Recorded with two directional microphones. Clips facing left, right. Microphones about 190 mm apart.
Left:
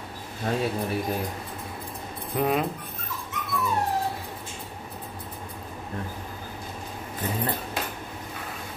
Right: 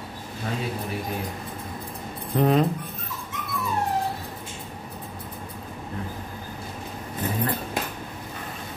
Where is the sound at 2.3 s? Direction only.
5° left (ahead or behind).